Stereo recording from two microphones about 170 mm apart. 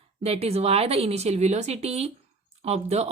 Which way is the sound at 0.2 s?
40° right (ahead or behind).